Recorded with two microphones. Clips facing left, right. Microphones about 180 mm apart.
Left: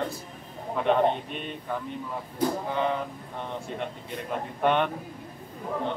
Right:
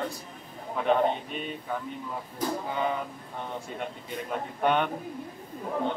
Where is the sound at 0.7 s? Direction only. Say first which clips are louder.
Left 1 dB; centre (ahead or behind).